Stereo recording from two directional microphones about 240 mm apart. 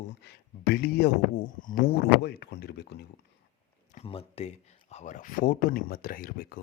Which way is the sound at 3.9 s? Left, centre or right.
Left.